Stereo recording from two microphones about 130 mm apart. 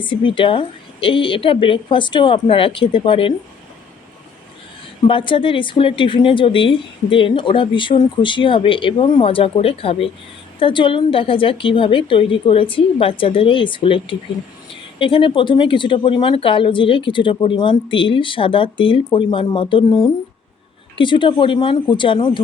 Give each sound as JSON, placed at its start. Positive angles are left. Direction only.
{"t": 0.0, "sound": "speech", "side_deg": 40}
{"t": 5.0, "sound": "speech", "side_deg": 40}